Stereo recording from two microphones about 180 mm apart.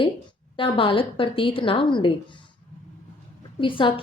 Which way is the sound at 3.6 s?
30° left (ahead or behind).